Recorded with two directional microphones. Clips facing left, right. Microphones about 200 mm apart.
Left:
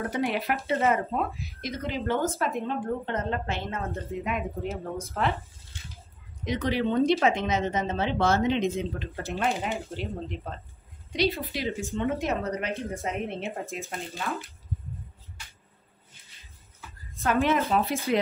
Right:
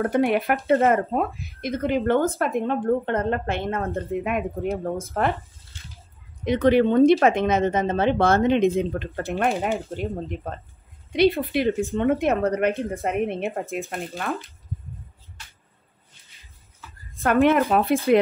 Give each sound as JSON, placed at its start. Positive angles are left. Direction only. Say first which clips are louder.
{"t": 0.0, "sound": "speech", "louder": "right 7 dB", "side_deg": -55}
{"t": 6.4, "sound": "speech", "louder": "right 9 dB", "side_deg": -55}
{"t": 17.2, "sound": "speech", "louder": "right 6 dB", "side_deg": -55}